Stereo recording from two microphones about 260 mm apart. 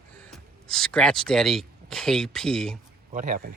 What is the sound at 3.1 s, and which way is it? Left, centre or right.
Speech, right.